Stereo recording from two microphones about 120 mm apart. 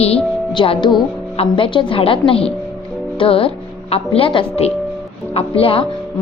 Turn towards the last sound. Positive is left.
turn(degrees=50)  # may be behind; listen again after turning